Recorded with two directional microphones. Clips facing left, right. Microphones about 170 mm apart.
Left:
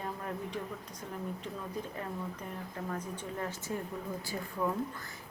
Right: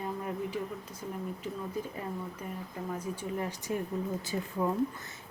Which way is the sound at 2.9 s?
15° right (ahead or behind).